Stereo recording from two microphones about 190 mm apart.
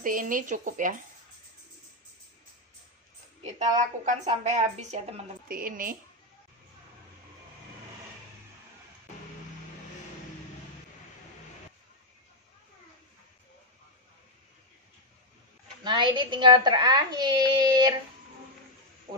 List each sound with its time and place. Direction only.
0.0 s speech: 45° right (ahead or behind)
3.5 s a woman's voice: 40° right (ahead or behind)
5.5 s speech: 45° right (ahead or behind)
15.8 s a child's voice: 25° right (ahead or behind)